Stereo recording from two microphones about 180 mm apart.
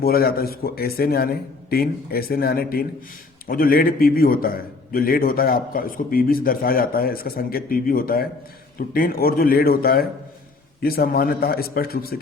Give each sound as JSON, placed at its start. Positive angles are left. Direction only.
{"t": 0.0, "sound": "a man's voice", "side_deg": 55}